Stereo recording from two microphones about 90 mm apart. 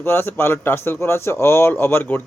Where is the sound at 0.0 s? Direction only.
25° left (ahead or behind).